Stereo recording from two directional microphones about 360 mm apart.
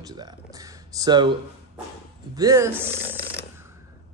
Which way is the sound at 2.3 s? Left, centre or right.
Centre.